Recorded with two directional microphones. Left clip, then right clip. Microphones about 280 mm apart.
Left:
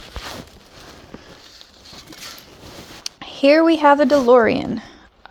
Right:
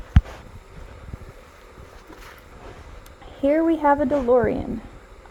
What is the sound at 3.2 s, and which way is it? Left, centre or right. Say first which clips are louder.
Speech: left 7 dB; left.